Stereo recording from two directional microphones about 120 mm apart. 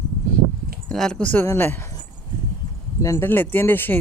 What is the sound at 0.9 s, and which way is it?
Speech, 5° left (ahead or behind).